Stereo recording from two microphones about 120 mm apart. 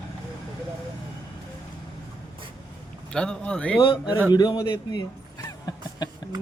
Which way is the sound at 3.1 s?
5° left (ahead or behind).